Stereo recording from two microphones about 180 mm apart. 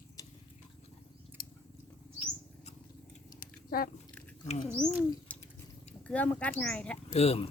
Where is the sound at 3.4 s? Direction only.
55° left (ahead or behind).